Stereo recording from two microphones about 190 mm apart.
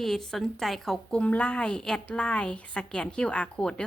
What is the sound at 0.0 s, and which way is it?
A woman's voice, centre (ahead or behind).